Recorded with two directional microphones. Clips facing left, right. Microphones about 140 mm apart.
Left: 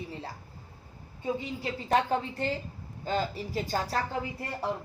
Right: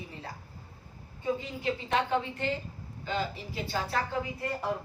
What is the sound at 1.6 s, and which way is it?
Speech, 40° left (ahead or behind).